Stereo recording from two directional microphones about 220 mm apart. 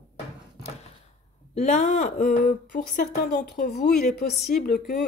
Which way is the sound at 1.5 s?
30° left (ahead or behind).